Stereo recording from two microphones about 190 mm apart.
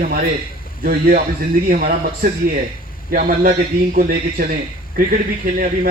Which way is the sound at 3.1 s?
50° right (ahead or behind).